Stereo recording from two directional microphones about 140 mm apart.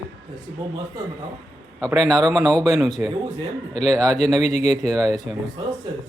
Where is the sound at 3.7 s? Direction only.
50° left (ahead or behind).